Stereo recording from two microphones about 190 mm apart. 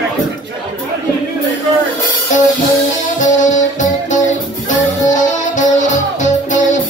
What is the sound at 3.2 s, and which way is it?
Music, 40° left (ahead or behind).